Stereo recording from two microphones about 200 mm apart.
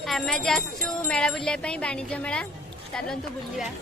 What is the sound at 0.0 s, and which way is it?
Speech, centre (ahead or behind).